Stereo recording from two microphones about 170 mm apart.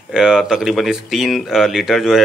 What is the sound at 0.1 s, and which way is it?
Speech, 5° right (ahead or behind).